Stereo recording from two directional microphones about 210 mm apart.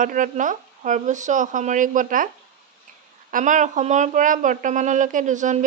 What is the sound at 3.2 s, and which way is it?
Speech, 40° right (ahead or behind).